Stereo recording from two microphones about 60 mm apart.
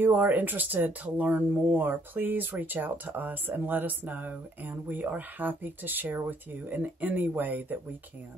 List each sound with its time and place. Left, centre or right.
0.0 s speech: right